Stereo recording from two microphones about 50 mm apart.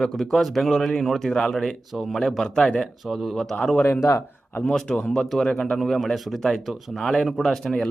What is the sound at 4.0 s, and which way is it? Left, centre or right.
Speech, left.